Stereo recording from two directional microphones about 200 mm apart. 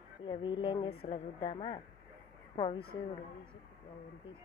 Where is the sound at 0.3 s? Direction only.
25° left (ahead or behind).